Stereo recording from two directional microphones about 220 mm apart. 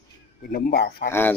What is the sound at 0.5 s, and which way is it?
Speech, 45° left (ahead or behind).